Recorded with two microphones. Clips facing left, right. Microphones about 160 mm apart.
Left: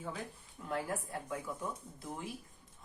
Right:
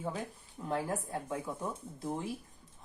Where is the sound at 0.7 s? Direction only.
25° right (ahead or behind).